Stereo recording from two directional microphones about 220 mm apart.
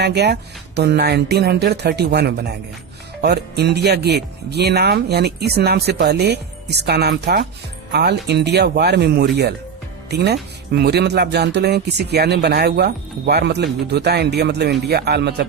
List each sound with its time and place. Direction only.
0.0 s speech: 50° right (ahead or behind)